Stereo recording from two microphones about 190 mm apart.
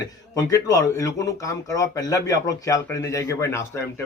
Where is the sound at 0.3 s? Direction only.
15° left (ahead or behind).